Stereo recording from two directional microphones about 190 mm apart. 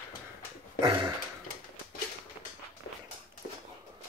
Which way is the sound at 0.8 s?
25° right (ahead or behind).